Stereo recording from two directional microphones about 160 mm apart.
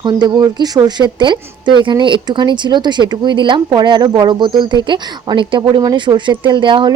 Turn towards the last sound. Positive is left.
turn(degrees=-30)  # may be behind; listen again after turning